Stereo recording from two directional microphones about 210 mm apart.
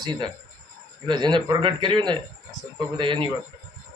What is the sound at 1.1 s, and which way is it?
A man's voice, 20° right (ahead or behind).